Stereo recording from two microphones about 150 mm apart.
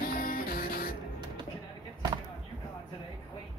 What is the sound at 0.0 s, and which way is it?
Music, 70° left (ahead or behind).